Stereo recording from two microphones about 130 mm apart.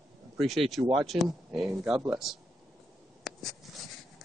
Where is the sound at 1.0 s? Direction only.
Centre (ahead or behind).